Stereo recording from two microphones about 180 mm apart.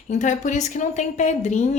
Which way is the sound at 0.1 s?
45° left (ahead or behind).